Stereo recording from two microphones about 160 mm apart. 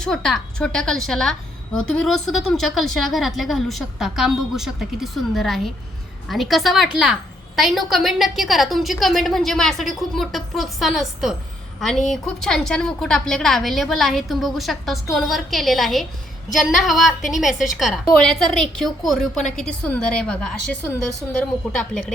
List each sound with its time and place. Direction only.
0.0 s a woman's voice: 5° left (ahead or behind)
21.9 s a woman's voice: 50° left (ahead or behind)